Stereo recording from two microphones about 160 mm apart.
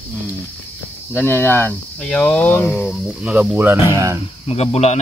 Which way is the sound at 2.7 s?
5° right (ahead or behind).